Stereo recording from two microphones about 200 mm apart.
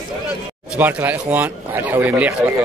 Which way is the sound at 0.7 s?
10° right (ahead or behind).